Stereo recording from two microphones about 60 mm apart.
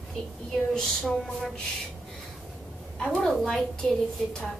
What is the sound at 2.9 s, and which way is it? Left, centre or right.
A woman's voice, centre.